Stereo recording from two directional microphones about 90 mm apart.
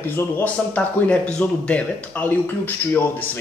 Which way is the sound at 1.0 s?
10° left (ahead or behind).